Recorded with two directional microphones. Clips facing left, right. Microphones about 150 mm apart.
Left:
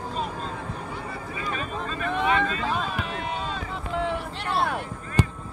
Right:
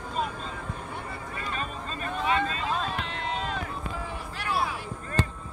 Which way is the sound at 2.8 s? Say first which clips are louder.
Left 2 dB; 10° left (ahead or behind).